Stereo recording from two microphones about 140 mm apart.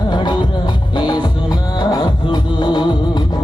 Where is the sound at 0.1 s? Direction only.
30° left (ahead or behind).